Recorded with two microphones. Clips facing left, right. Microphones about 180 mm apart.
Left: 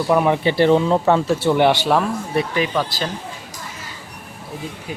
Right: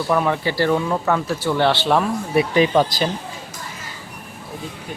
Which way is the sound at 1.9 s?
5° right (ahead or behind).